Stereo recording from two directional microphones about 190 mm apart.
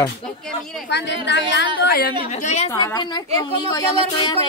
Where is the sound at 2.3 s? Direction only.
35° left (ahead or behind).